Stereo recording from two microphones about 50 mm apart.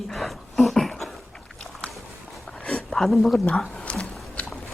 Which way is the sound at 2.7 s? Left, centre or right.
Centre.